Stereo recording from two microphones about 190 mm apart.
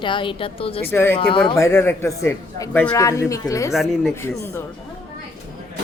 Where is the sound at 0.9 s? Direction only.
10° left (ahead or behind).